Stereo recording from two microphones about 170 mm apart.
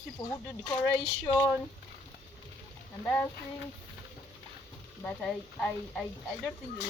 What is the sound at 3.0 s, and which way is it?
Speech, 5° left (ahead or behind).